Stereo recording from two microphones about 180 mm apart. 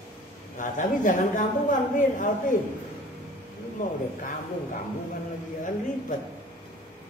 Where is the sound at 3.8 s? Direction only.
45° left (ahead or behind).